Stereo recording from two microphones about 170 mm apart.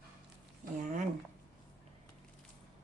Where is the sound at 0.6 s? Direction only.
50° right (ahead or behind).